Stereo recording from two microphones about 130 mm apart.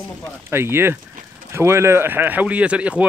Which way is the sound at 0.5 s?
20° right (ahead or behind).